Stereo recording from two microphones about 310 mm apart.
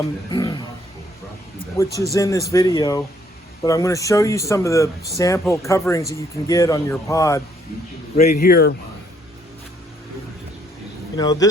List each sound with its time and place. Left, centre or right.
0.3 s speech: centre
1.8 s speech: centre
8.1 s speech: left
11.2 s speech: centre